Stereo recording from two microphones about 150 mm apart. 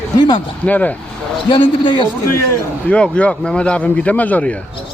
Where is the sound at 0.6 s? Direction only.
10° left (ahead or behind).